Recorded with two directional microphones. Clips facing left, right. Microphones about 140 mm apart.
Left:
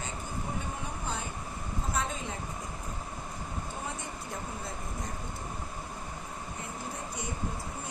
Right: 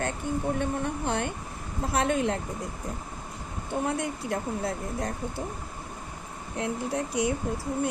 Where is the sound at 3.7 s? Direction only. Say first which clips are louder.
Right 10 dB; 70° right (ahead or behind).